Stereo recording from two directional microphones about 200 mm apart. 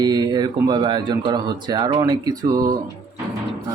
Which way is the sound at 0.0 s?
20° right (ahead or behind).